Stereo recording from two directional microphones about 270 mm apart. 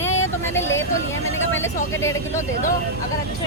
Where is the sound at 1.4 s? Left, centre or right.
Left.